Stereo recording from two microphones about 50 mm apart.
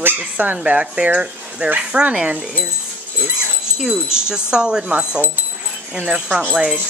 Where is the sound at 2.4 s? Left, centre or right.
Centre.